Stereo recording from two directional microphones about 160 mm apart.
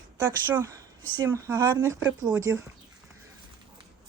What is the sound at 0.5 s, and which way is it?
Speech, 20° right (ahead or behind).